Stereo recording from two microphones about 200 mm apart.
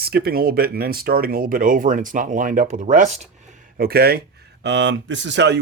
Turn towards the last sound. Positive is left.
turn(degrees=-60)  # may be behind; listen again after turning